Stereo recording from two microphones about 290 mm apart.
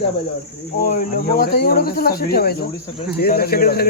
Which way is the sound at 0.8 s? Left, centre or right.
Left.